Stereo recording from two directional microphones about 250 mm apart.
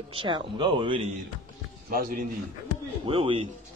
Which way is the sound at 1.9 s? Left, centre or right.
Right.